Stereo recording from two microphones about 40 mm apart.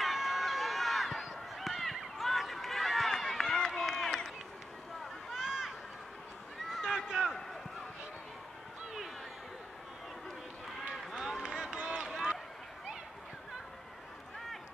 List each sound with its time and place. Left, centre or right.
0.0 s run: centre
1.2 s honk: centre
3.5 s run: centre
5.3 s run: centre
6.8 s a sound: centre
11.1 s run: centre